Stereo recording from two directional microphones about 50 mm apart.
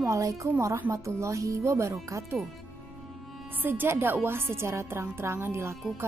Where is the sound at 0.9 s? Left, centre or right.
Right.